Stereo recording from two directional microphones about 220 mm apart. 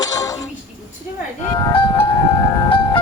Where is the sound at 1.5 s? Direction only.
20° left (ahead or behind).